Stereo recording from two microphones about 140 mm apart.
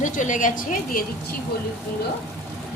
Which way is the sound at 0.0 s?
65° left (ahead or behind).